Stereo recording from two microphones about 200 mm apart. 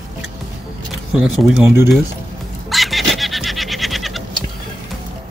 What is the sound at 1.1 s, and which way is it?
Speech, centre (ahead or behind).